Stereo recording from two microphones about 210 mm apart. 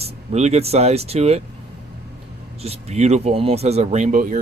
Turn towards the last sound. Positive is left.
turn(degrees=-40)  # may be behind; listen again after turning